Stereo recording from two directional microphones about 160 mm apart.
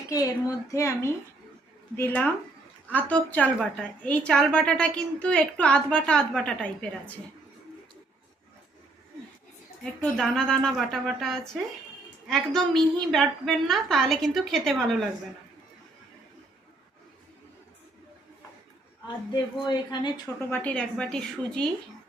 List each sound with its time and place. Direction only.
0.1 s a woman's voice: 20° left (ahead or behind); by 6.7 s 5° left (ahead or behind)
10.0 s a woman's voice: centre (ahead or behind)
19.0 s a woman's voice: 30° left (ahead or behind)
20.4 s a woman's voice: 10° left (ahead or behind)